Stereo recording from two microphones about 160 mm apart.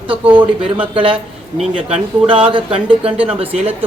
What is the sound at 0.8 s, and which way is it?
A man's voice, 35° right (ahead or behind).